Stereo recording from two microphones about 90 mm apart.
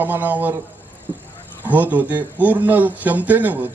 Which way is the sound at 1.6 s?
20° right (ahead or behind).